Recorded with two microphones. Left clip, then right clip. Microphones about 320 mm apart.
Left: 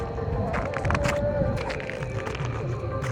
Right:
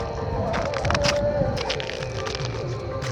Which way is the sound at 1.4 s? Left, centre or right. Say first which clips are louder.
Right 3 dB; right.